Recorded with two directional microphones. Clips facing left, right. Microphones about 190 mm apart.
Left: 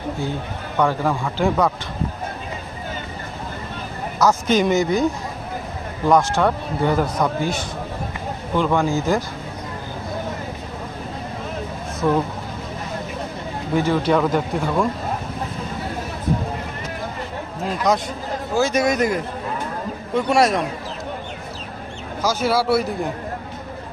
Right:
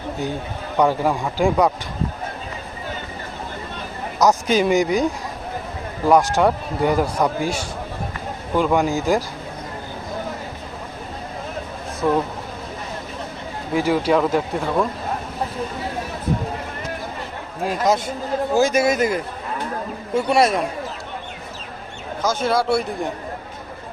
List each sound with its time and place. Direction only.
0.8 s a man's voice: 15° right (ahead or behind)
4.2 s a man's voice: 15° right (ahead or behind)
6.1 s a man's voice: 10° right (ahead or behind)
12.0 s a man's voice: centre (ahead or behind)
13.7 s a man's voice: 10° right (ahead or behind)
17.8 s a man's voice: centre (ahead or behind)
20.1 s a man's voice: centre (ahead or behind)
22.2 s speech: 10° left (ahead or behind)